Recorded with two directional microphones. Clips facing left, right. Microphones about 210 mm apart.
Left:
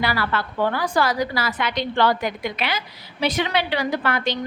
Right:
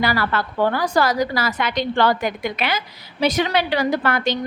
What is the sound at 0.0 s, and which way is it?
A woman's voice, 45° right (ahead or behind).